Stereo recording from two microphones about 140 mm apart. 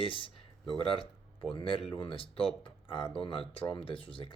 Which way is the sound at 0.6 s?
5° left (ahead or behind).